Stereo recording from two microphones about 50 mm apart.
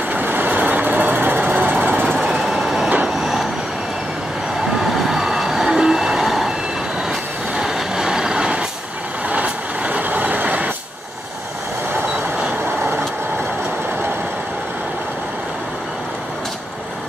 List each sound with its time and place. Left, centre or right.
0.1 s vehicle: right
2.0 s vehicle: centre
2.3 s vehicle: centre
2.9 s vehicle: right
4.7 s vehicle: centre
7.5 s vehicle: centre
9.3 s vehicle: right